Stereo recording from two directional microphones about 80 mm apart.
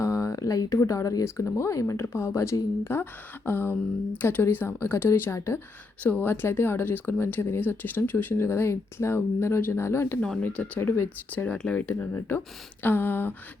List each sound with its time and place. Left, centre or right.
0.0 s speech: left
6.0 s speech: centre
11.5 s speech: centre
11.8 s speech: left